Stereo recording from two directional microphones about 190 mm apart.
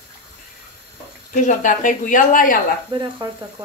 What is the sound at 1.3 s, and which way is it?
Speech, 40° left (ahead or behind).